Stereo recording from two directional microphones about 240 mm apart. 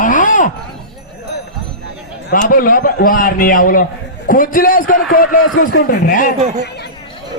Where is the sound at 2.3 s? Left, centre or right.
Left.